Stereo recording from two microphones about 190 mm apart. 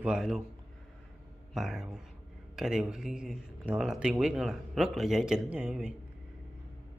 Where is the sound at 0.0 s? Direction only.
5° right (ahead or behind).